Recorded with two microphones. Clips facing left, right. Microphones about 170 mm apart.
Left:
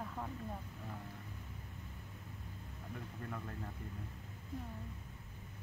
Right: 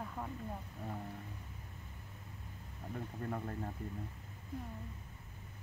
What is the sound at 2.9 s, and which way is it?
Speech, 40° right (ahead or behind).